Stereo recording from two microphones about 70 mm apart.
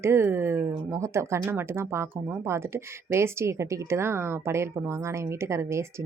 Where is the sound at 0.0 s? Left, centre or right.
Right.